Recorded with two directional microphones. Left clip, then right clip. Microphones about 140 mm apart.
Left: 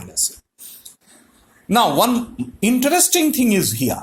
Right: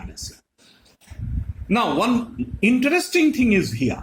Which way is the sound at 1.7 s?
40° left (ahead or behind).